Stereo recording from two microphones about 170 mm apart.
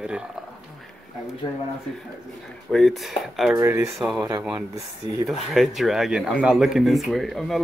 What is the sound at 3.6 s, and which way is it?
Speech, 15° right (ahead or behind).